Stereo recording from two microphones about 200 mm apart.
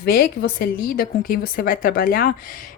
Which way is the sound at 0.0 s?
50° left (ahead or behind).